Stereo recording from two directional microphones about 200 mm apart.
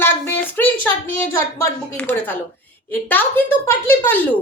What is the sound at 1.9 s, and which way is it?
A woman's voice, 10° left (ahead or behind).